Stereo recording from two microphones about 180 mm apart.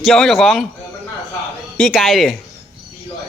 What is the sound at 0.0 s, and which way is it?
Speech, centre (ahead or behind).